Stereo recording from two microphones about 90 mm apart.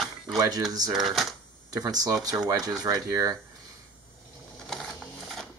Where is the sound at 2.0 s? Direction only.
45° right (ahead or behind).